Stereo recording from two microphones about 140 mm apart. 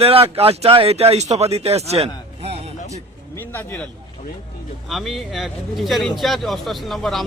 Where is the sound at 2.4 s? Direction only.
45° right (ahead or behind).